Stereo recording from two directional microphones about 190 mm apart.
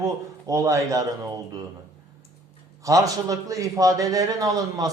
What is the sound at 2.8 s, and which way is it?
A man's voice, 20° right (ahead or behind).